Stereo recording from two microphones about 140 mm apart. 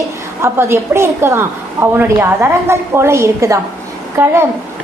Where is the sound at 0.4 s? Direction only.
20° right (ahead or behind).